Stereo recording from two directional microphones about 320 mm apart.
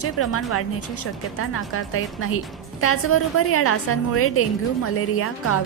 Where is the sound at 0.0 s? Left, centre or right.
Left.